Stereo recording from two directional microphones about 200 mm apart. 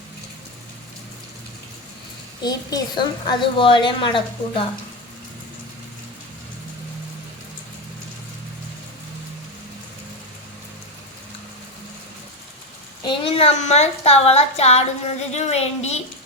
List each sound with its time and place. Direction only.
2.4 s a woman's voice: 20° left (ahead or behind)
13.0 s a child's voice: 25° left (ahead or behind)